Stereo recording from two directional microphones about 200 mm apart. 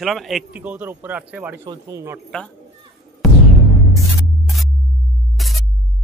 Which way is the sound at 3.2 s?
Centre (ahead or behind).